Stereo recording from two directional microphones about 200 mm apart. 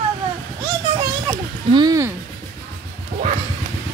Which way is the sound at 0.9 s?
25° right (ahead or behind).